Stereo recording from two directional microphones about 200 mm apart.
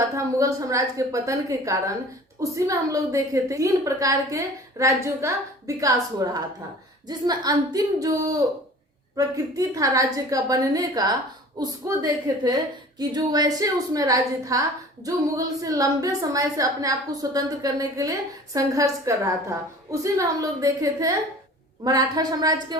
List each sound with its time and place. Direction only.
0.3 s a woman's voice: 15° right (ahead or behind)